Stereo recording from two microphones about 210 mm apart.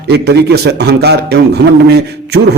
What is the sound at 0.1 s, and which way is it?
A man's voice, 50° right (ahead or behind).